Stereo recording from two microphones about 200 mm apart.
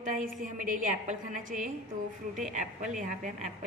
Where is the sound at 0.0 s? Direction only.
40° right (ahead or behind).